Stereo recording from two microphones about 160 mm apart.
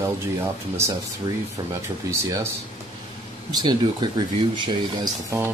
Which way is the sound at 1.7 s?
20° right (ahead or behind).